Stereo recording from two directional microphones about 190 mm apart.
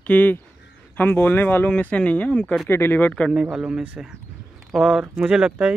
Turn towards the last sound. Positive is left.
turn(degrees=-5)  # may be behind; listen again after turning